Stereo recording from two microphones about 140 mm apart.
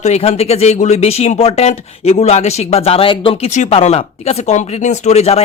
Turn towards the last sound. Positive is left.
turn(degrees=50)  # may be behind; listen again after turning